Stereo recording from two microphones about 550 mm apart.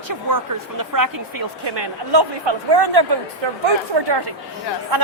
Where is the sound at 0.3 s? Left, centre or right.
Right.